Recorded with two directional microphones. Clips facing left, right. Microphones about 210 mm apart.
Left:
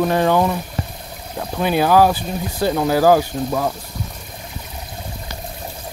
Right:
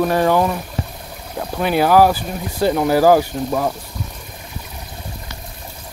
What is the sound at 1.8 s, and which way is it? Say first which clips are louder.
Speech: right 2 dB; 10° right (ahead or behind).